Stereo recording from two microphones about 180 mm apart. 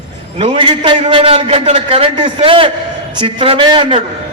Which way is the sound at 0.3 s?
30° right (ahead or behind).